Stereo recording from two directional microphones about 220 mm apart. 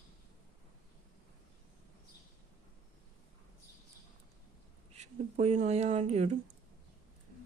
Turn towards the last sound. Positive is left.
turn(degrees=-30)  # may be behind; listen again after turning